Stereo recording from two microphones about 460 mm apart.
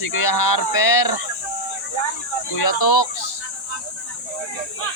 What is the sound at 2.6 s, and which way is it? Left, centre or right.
Speech, left.